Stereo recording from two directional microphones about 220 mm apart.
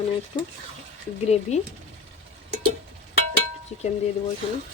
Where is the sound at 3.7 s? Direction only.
30° left (ahead or behind).